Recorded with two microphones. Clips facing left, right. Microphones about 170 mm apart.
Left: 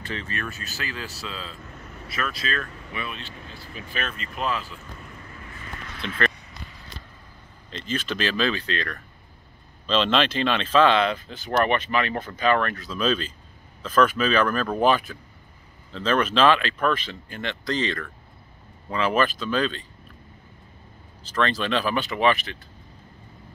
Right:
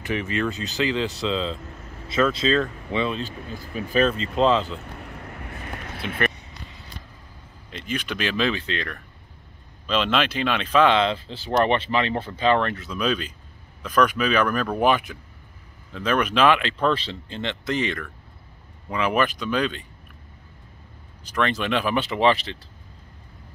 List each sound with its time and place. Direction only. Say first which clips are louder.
0.0 s speech: right 7 dB; 15° right (ahead or behind)
3.2 s speech: right 8 dB; 40° right (ahead or behind)
4.5 s speech: right 7 dB; 25° right (ahead or behind)
4.9 s a sound: right 5 dB; 70° right (ahead or behind); by 6.1 s 50° right (ahead or behind)
7.7 s speech: even; 15° right (ahead or behind)
16.7 s speech: right 2 dB; 30° right (ahead or behind)
21.2 s speech: even; 15° right (ahead or behind)